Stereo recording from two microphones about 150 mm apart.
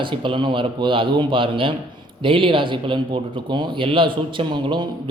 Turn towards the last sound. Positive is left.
turn(degrees=-30)  # may be behind; listen again after turning